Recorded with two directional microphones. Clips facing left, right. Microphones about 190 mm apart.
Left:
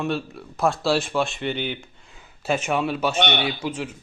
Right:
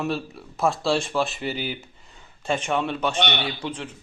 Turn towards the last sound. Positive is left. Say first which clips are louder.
# left 3 dB
turn(degrees=10)  # may be behind; listen again after turning